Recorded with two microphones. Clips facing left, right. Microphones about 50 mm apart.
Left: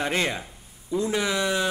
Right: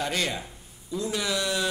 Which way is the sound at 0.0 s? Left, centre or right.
Left.